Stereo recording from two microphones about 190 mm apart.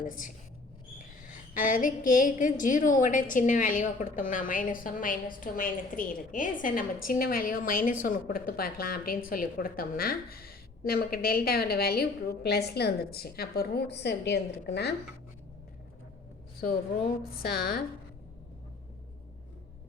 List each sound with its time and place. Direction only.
1.2 s a woman's voice: 45° left (ahead or behind); by 14.9 s 60° left (ahead or behind)
17.3 s a woman's voice: 55° left (ahead or behind)